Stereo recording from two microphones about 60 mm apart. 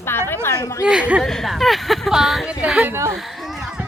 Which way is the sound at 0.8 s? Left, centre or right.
Right.